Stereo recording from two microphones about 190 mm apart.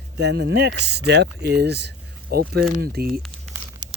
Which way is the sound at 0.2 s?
65° right (ahead or behind).